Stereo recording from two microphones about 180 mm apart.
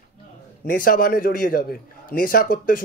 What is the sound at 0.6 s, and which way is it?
Speech, 50° left (ahead or behind).